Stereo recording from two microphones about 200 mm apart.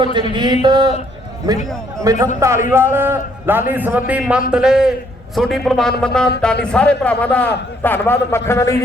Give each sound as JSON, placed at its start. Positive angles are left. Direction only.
{"t": 0.2, "sound": "a man's voice", "side_deg": -25}